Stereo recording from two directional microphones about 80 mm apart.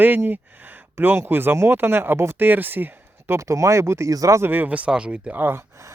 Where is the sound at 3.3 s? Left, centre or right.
Right.